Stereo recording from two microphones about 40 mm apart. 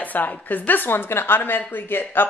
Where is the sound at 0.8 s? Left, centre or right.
Left.